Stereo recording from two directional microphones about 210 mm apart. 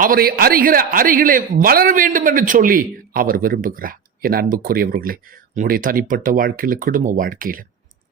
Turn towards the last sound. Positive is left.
turn(degrees=-40)  # may be behind; listen again after turning